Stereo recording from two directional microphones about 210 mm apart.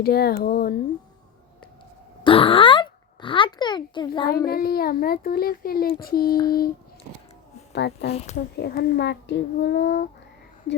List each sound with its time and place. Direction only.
0.0 s a child's voice: 50° left (ahead or behind)
2.2 s a sound: 25° left (ahead or behind)
4.4 s a child's voice: 45° left (ahead or behind)
6.1 s speech: 20° left (ahead or behind)
7.7 s a child's voice: 55° left (ahead or behind)